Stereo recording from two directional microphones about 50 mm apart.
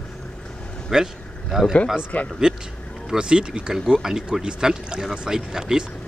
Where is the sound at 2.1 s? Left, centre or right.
Left.